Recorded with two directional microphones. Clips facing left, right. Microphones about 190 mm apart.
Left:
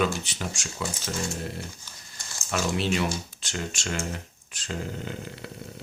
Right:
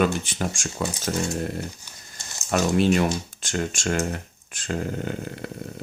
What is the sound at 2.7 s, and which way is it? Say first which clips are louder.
Speech: right 8 dB; 50° right (ahead or behind).